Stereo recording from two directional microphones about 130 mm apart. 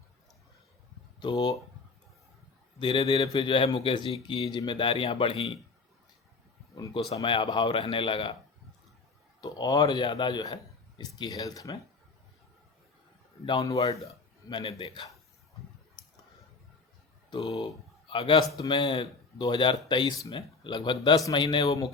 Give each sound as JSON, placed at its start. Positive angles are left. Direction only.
{"t": 1.2, "sound": "speech", "side_deg": 40}
{"t": 2.7, "sound": "speech", "side_deg": 40}
{"t": 7.1, "sound": "speech", "side_deg": 45}
{"t": 9.4, "sound": "speech", "side_deg": 30}
{"t": 14.5, "sound": "speech", "side_deg": 45}
{"t": 17.4, "sound": "speech", "side_deg": 50}
{"t": 18.5, "sound": "speech", "side_deg": 25}
{"t": 18.8, "sound": "speech", "side_deg": 35}
{"t": 21.3, "sound": "speech", "side_deg": 40}